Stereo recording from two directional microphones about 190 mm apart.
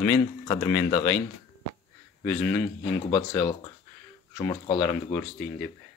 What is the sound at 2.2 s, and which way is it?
Speech, 10° left (ahead or behind).